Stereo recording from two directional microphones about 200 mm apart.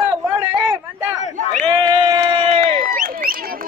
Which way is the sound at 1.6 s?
20° right (ahead or behind).